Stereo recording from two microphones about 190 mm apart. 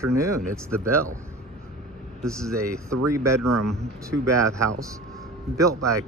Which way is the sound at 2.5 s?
15° right (ahead or behind).